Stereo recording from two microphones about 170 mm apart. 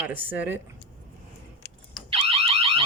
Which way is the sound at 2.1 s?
35° right (ahead or behind).